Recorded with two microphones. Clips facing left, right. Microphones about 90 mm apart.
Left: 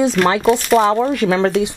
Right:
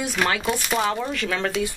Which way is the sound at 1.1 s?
25° left (ahead or behind).